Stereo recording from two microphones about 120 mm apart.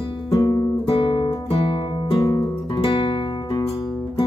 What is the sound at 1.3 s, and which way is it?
Guitar, 40° left (ahead or behind).